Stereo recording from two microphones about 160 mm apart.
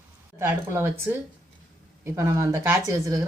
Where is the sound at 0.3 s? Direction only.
15° right (ahead or behind).